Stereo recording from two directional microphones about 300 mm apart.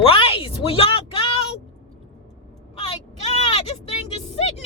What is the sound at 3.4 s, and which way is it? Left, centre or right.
Speech, left.